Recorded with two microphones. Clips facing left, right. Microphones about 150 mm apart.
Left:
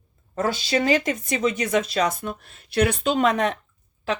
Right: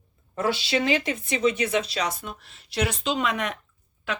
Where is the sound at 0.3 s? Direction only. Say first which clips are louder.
Left 2 dB; 45° left (ahead or behind).